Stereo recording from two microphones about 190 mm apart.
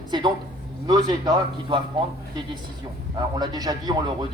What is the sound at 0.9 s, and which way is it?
Speech, 20° right (ahead or behind).